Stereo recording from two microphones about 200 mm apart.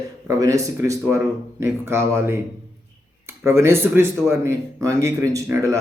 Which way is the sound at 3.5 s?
15° right (ahead or behind).